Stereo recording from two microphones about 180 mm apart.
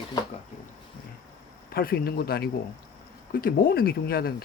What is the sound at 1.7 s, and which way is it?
Speech, 55° left (ahead or behind).